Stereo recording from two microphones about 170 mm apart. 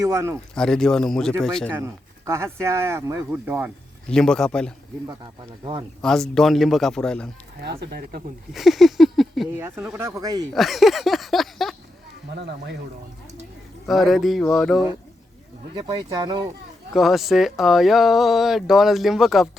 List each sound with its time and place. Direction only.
0.0 s speech: 15° right (ahead or behind)
0.5 s speech: 5° left (ahead or behind)
2.2 s speech: 15° right (ahead or behind)
4.1 s speech: 5° left (ahead or behind)
5.0 s speech: 25° right (ahead or behind)
6.0 s speech: 5° left (ahead or behind)
7.6 s speech: 80° right
8.5 s a sound: centre (ahead or behind)
9.6 s speech: 15° right (ahead or behind)
10.5 s speech: centre (ahead or behind)
12.3 s speech: 75° right (ahead or behind)
13.8 s speech: centre (ahead or behind)
15.7 s speech: 30° right (ahead or behind)
16.9 s speech: centre (ahead or behind)